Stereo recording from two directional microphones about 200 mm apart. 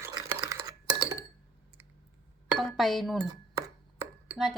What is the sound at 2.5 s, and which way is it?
Chink, centre (ahead or behind).